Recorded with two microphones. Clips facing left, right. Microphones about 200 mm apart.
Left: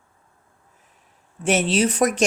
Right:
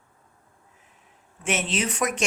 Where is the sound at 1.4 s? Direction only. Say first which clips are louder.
Left 7 dB; 35° left (ahead or behind).